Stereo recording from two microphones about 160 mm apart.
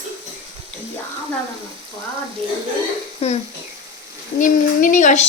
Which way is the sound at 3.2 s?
40° left (ahead or behind).